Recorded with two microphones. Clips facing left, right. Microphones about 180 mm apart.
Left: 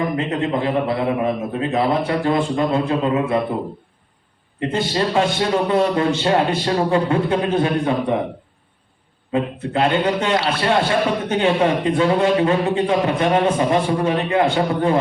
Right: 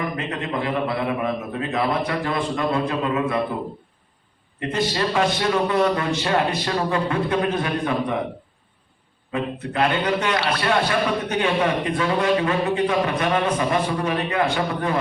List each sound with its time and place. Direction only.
0.2 s a man's voice: 25° left (ahead or behind)
4.7 s a man's voice: 30° left (ahead or behind)
9.3 s a man's voice: 30° left (ahead or behind)